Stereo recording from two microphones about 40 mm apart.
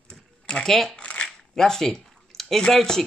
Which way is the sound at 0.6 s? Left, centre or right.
Centre.